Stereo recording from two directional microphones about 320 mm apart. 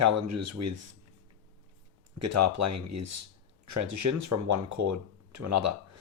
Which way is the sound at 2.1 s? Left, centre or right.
Right.